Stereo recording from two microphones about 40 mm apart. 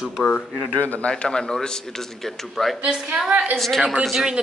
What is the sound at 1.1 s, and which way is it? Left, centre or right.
Speech, left.